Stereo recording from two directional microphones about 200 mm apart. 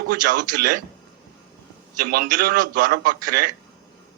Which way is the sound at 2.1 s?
45° right (ahead or behind).